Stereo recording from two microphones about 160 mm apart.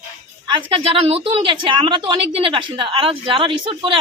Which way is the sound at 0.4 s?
30° right (ahead or behind).